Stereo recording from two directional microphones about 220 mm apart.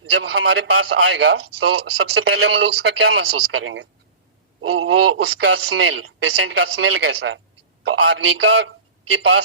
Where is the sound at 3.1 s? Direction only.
55° right (ahead or behind).